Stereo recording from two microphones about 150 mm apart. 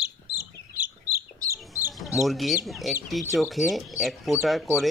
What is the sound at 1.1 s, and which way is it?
Bird, 20° right (ahead or behind).